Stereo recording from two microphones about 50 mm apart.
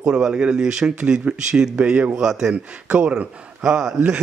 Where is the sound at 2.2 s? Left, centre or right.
Centre.